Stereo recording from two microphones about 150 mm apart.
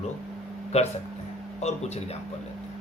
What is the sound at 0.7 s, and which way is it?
Speech, 50° left (ahead or behind).